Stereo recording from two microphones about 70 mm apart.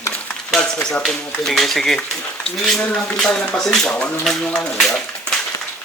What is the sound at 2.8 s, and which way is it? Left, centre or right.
Speech, centre.